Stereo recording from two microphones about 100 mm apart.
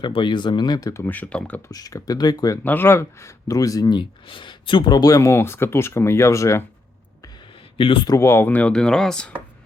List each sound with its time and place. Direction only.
0.0 s speech: 55° left (ahead or behind); by 1.0 s 35° left (ahead or behind)
1.0 s speech: 15° left (ahead or behind)
1.7 s speech: 40° left (ahead or behind)
2.6 s speech: 20° left (ahead or behind)
7.8 s a man's voice: 60° left (ahead or behind)
8.0 s speech: 30° left (ahead or behind); by 9.3 s 5° left (ahead or behind)